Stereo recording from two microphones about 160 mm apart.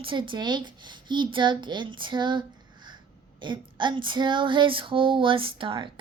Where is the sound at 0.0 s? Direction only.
30° right (ahead or behind).